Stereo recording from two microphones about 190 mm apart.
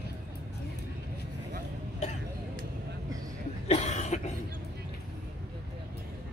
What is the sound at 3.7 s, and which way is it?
Cough, 35° left (ahead or behind).